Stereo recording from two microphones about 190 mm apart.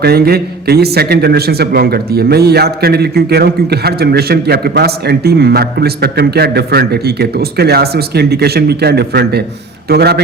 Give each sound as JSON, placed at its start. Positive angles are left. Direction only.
{"t": 0.0, "sound": "a man's voice", "side_deg": -55}